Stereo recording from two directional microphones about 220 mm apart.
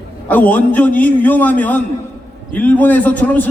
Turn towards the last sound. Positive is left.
turn(degrees=5)  # may be behind; listen again after turning